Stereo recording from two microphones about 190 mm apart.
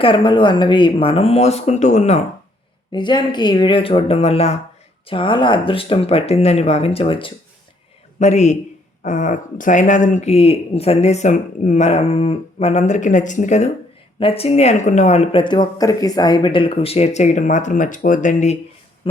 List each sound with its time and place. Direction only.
0.0 s speech: 25° left (ahead or behind)
2.9 s speech: 25° left (ahead or behind); by 18.5 s 40° left (ahead or behind)